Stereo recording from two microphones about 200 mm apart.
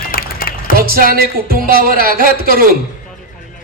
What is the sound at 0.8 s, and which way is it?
A man's voice, 45° right (ahead or behind).